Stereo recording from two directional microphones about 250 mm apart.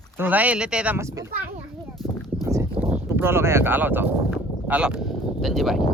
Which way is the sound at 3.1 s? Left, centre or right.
Centre.